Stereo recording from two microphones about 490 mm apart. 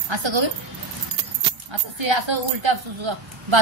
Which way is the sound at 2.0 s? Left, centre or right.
Right.